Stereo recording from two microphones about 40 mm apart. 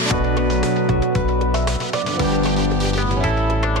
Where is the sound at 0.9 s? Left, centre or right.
Centre.